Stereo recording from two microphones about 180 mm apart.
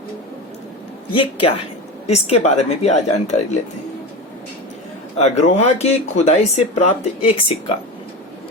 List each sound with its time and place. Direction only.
1.1 s speech: 30° left (ahead or behind)
5.1 s speech: 40° left (ahead or behind)